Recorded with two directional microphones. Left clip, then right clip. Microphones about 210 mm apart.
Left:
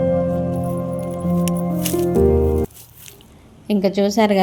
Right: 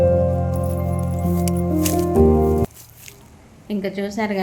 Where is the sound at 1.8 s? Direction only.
20° left (ahead or behind).